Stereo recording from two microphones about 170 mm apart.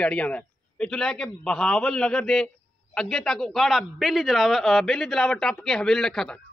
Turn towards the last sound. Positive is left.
turn(degrees=5)  # may be behind; listen again after turning